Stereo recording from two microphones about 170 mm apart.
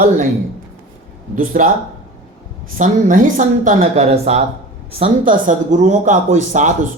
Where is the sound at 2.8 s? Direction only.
50° right (ahead or behind).